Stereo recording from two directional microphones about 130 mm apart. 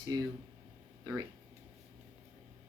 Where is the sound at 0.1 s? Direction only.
25° right (ahead or behind).